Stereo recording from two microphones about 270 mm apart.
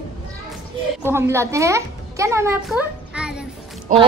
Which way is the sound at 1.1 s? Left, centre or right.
Centre.